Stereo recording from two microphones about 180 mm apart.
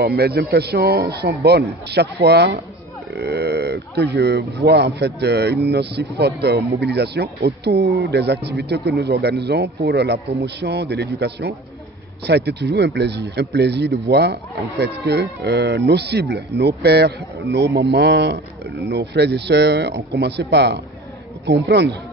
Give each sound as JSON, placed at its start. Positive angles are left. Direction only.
{"t": 0.0, "sound": "speech", "side_deg": -65}